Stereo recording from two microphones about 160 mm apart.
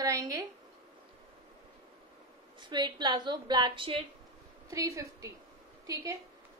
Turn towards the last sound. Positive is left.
turn(degrees=-20)  # may be behind; listen again after turning